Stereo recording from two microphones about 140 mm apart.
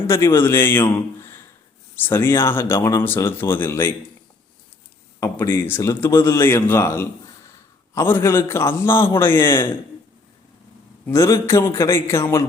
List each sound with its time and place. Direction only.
0.1 s speech: 20° left (ahead or behind)
5.2 s speech: 15° left (ahead or behind)
11.0 s a man's voice: 20° left (ahead or behind)